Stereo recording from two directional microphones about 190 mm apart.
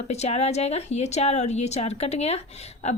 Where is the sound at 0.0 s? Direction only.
35° left (ahead or behind).